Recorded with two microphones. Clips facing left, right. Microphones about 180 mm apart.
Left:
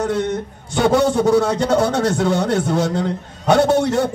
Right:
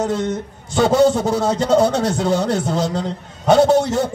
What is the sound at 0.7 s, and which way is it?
A man's voice, 60° left (ahead or behind).